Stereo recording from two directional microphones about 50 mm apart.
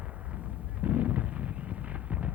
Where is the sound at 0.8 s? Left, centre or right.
Right.